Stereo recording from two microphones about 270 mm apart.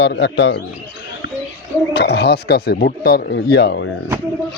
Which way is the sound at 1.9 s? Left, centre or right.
Left.